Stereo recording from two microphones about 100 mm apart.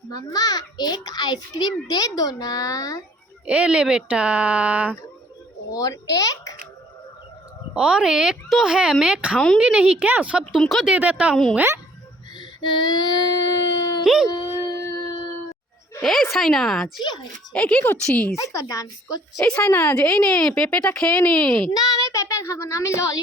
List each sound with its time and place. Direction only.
0.3 s a child's voice: 40° left (ahead or behind)
3.4 s speech: 10° right (ahead or behind)
5.7 s a child's voice: 35° left (ahead or behind)
7.7 s speech: 10° right (ahead or behind)
10.6 s a woman's voice: centre (ahead or behind)
10.8 s speech: 15° right (ahead or behind)
12.4 s child singing: 50° left (ahead or behind)
14.0 s speech: 5° right (ahead or behind)
14.3 s a sound: 40° left (ahead or behind)
16.0 s a woman's voice: centre (ahead or behind)
18.3 s a child's voice: 35° left (ahead or behind)
19.4 s speech: 10° left (ahead or behind)
21.7 s a child's voice: 40° left (ahead or behind)